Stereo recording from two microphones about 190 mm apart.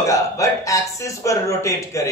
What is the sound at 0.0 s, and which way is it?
A man's voice, 15° left (ahead or behind).